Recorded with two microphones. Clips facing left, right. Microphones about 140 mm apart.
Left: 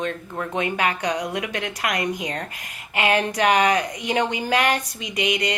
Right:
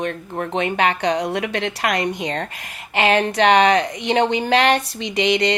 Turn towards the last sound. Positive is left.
turn(degrees=-30)  # may be behind; listen again after turning